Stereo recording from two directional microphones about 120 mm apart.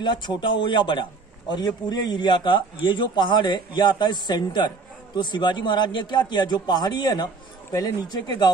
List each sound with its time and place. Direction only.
0.0 s a man's voice: 40° left (ahead or behind)